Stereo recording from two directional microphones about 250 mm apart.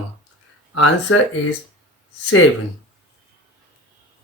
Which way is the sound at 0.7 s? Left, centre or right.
Left.